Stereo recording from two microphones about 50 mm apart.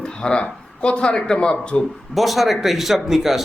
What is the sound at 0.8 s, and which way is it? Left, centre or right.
Speech, left.